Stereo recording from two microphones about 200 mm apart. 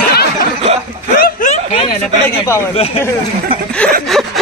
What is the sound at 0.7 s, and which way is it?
Speech, 30° right (ahead or behind).